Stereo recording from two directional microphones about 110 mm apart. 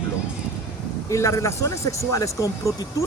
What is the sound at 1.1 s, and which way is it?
Speech, 25° left (ahead or behind).